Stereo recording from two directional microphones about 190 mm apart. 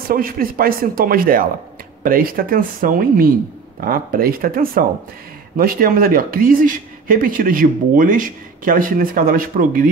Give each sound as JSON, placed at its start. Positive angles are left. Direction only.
{"t": 0.1, "sound": "speech", "side_deg": -50}